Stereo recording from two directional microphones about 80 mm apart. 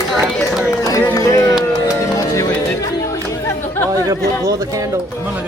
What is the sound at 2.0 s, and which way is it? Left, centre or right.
Music, left.